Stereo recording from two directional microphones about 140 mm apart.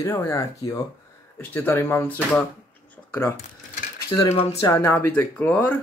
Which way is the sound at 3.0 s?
10° left (ahead or behind).